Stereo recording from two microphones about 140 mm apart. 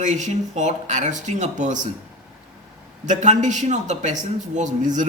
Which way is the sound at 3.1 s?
60° right (ahead or behind).